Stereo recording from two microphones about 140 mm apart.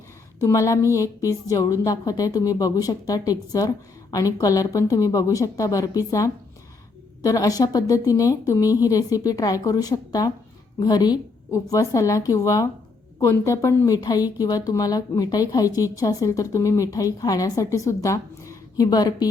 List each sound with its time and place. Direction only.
0.4 s a woman's voice: 20° left (ahead or behind)